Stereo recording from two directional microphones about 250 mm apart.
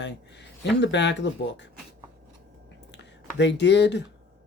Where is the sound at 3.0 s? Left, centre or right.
Left.